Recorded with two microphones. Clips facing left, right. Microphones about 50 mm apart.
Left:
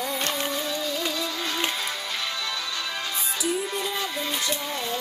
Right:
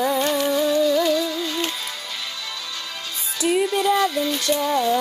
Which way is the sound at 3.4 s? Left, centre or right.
Right.